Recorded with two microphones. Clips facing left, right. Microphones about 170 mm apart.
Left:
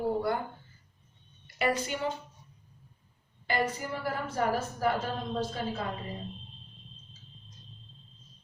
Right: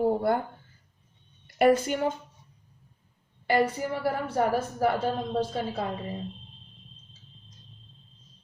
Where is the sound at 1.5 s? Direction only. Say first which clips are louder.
Right 8 dB; 50° right (ahead or behind).